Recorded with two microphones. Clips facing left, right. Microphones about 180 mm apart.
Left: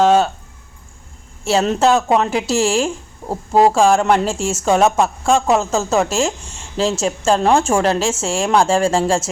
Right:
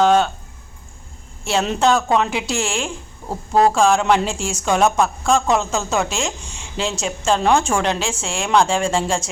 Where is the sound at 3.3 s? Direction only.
25° left (ahead or behind).